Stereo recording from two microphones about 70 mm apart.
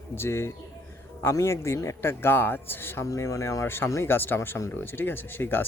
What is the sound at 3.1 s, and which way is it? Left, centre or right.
Speech, left.